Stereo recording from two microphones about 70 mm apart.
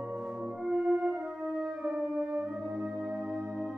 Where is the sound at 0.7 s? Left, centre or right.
Centre.